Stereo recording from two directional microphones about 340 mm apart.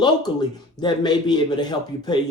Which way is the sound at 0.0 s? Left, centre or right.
Centre.